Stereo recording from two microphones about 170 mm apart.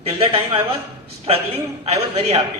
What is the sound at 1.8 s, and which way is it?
Speech, 40° right (ahead or behind).